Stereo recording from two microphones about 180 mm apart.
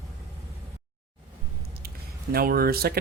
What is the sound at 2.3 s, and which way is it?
Speech, 55° right (ahead or behind).